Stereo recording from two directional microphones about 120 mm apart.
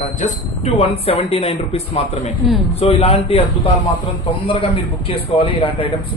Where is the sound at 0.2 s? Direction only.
60° left (ahead or behind).